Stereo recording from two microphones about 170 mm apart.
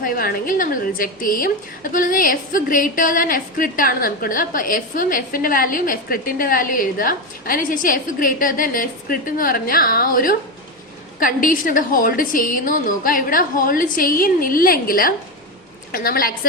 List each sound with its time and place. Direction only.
0.0 s a woman's voice: 55° left (ahead or behind)